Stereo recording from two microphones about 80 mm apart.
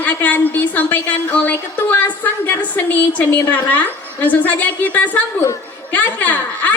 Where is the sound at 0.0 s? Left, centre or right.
Centre.